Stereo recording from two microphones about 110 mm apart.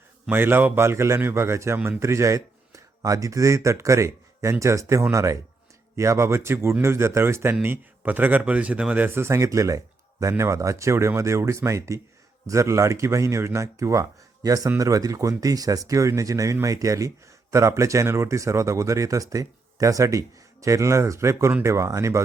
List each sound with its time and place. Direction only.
0.3 s speech: 20° right (ahead or behind)